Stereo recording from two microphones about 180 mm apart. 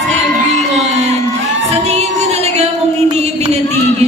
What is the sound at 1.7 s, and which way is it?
Music, 35° right (ahead or behind).